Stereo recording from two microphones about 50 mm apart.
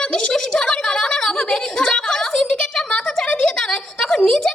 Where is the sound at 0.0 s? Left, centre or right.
Centre.